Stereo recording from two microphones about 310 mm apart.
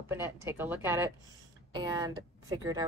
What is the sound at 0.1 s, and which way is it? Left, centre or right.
A woman's voice, centre.